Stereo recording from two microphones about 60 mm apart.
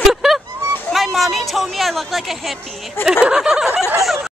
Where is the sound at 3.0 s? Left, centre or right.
Centre.